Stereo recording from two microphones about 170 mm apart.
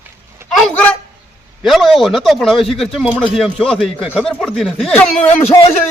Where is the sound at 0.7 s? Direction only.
10° left (ahead or behind).